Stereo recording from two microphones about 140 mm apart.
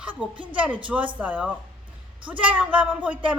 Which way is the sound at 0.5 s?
10° right (ahead or behind).